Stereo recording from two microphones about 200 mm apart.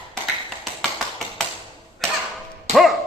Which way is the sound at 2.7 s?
Centre (ahead or behind).